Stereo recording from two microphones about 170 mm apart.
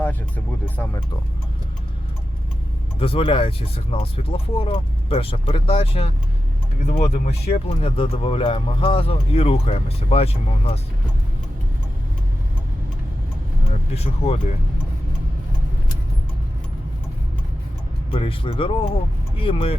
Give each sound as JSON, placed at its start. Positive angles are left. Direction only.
{"t": 0.0, "sound": "speech", "side_deg": 10}
{"t": 3.0, "sound": "speech", "side_deg": 35}
{"t": 13.9, "sound": "speech", "side_deg": 35}
{"t": 18.1, "sound": "speech", "side_deg": 35}